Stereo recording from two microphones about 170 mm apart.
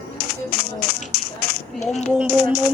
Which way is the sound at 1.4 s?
65° left (ahead or behind).